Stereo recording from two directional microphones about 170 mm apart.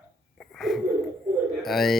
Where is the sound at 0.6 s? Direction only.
Centre (ahead or behind).